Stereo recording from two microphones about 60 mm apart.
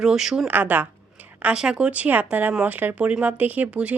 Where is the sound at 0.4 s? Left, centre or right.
Right.